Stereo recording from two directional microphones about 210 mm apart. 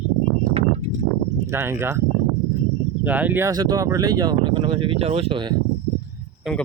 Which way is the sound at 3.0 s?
5° right (ahead or behind).